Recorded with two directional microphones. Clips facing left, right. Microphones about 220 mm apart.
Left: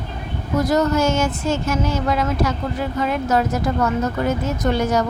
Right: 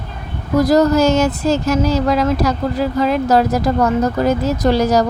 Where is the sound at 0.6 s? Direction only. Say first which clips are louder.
Right 6 dB; 35° right (ahead or behind).